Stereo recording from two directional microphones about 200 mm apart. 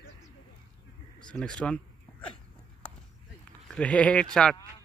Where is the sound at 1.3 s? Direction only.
5° left (ahead or behind).